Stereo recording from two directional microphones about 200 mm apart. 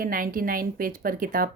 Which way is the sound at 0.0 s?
45° right (ahead or behind).